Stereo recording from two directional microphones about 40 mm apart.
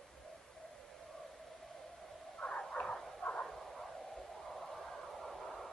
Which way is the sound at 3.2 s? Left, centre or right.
Left.